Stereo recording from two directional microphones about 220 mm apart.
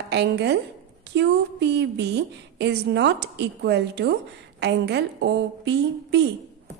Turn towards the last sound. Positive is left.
turn(degrees=-50)  # may be behind; listen again after turning